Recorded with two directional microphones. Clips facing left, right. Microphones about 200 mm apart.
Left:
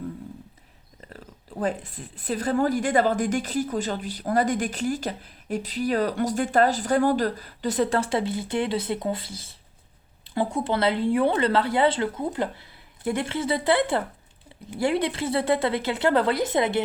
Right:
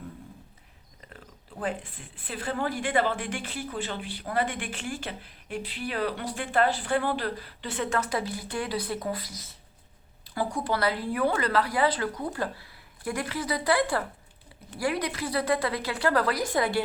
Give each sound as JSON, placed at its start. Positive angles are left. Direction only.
{"t": 1.1, "sound": "a woman's voice", "side_deg": 40}